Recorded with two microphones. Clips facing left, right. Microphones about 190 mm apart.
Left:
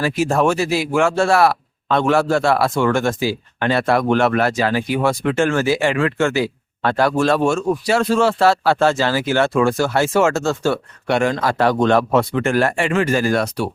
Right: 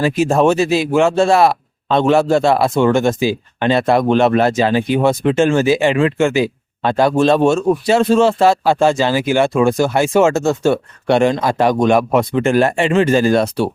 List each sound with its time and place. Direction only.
0.0 s speech: 20° right (ahead or behind)